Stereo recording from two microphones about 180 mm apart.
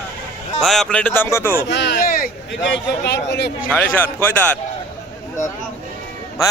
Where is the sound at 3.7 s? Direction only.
10° left (ahead or behind).